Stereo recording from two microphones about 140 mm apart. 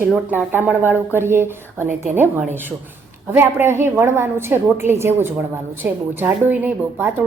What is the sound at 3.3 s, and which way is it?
Speech, 15° right (ahead or behind).